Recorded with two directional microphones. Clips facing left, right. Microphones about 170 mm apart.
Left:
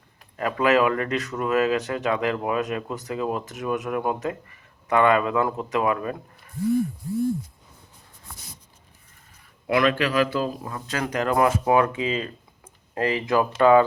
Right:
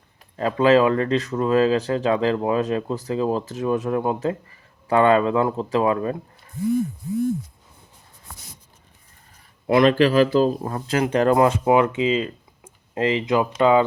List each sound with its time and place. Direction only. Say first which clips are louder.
0.3 s speech: right 4 dB; 25° right (ahead or behind)
9.6 s a man's voice: right 6 dB; 30° right (ahead or behind)